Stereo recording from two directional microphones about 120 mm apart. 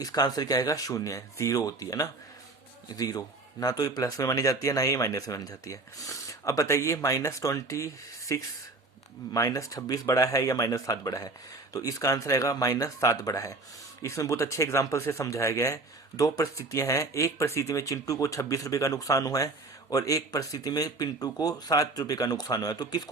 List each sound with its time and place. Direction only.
0.0 s speech: 30° left (ahead or behind)